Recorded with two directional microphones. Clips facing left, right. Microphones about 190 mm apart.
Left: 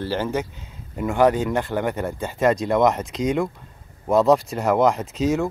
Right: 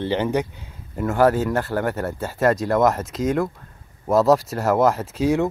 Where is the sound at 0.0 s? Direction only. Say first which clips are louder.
Right 3 dB; 20° right (ahead or behind).